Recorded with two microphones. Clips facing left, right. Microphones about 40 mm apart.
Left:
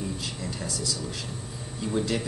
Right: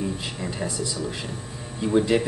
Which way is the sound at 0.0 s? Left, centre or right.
Right.